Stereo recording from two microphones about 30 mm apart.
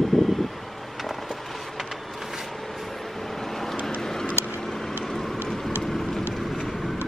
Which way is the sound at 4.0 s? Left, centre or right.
Centre.